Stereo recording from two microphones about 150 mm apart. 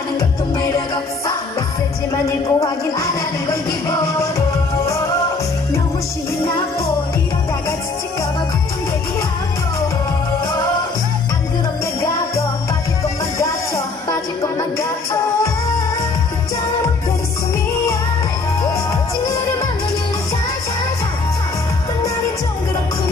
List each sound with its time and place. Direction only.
0.6 s music: 25° left (ahead or behind)